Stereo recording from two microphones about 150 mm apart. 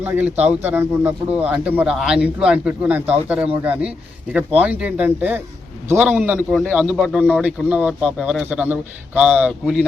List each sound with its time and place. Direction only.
0.0 s a man's voice: 10° right (ahead or behind)